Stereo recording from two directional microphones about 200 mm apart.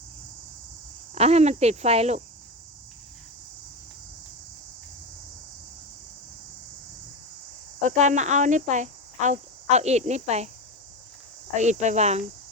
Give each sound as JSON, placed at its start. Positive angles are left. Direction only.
{"t": 1.1, "sound": "speech", "side_deg": -30}
{"t": 7.8, "sound": "speech", "side_deg": -35}
{"t": 11.5, "sound": "speech", "side_deg": -35}